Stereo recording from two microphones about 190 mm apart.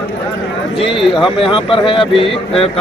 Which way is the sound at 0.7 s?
25° left (ahead or behind).